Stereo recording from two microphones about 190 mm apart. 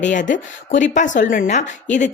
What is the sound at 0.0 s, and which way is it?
A woman's voice, 40° left (ahead or behind).